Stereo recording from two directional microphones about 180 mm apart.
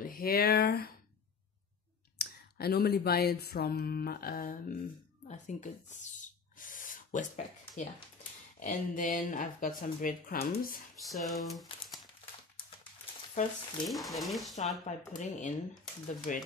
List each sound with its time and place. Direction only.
0.0 s speech: 55° left (ahead or behind)
2.1 s a sound: 60° left (ahead or behind)
5.3 s speech: 40° left (ahead or behind)
6.6 s a sound: 50° left (ahead or behind)
8.5 s speech: 45° left (ahead or behind)
11.0 s speech: centre (ahead or behind)
13.8 s speech: centre (ahead or behind)
14.9 s speech: 40° left (ahead or behind)